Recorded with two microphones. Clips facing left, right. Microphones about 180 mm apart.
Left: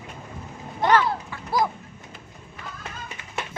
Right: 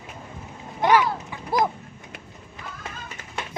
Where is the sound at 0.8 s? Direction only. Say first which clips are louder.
Right 1 dB; 10° right (ahead or behind).